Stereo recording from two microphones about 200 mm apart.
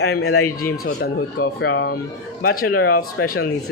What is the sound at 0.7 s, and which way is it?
Speech, 50° left (ahead or behind).